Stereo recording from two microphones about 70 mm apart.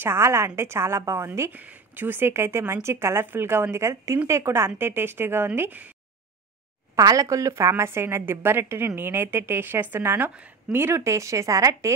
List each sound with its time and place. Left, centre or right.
0.0 s a woman's voice: right
1.5 s a woman's voice: right
7.0 s a woman's voice: right
11.0 s speech: right